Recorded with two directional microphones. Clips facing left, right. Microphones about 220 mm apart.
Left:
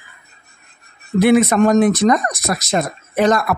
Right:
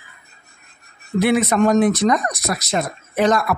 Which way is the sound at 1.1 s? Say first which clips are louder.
Left 4 dB; 50° left (ahead or behind).